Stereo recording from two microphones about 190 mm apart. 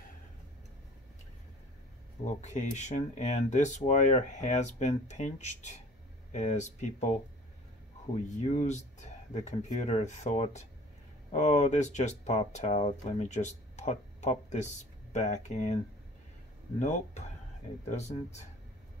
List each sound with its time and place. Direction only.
2.4 s speech: 40° left (ahead or behind)
8.4 s speech: 40° left (ahead or behind)
16.8 s speech: 40° left (ahead or behind)